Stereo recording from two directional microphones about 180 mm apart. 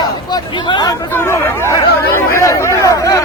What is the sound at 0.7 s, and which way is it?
Hubbub, 25° left (ahead or behind).